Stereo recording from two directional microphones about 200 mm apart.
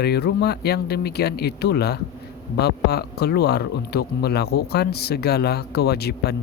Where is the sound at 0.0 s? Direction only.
55° left (ahead or behind).